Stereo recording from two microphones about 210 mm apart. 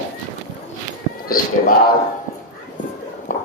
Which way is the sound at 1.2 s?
45° left (ahead or behind).